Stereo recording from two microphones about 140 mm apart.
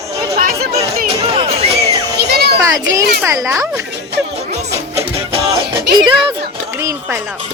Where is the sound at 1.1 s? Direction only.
40° right (ahead or behind).